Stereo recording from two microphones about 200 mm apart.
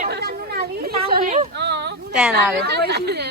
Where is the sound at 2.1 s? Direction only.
5° right (ahead or behind).